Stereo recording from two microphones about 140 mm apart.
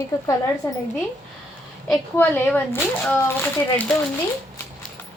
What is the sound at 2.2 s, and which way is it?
Speech, 15° left (ahead or behind).